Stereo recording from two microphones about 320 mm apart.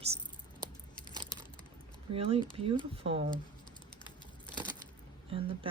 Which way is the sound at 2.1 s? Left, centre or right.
Centre.